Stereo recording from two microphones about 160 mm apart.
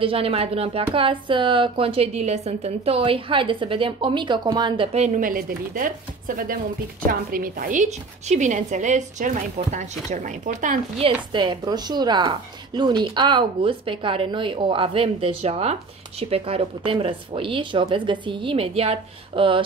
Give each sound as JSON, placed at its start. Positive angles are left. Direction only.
{"t": 0.0, "sound": "speech", "side_deg": -35}
{"t": 4.9, "sound": "a woman's voice", "side_deg": -50}
{"t": 11.0, "sound": "speech", "side_deg": -35}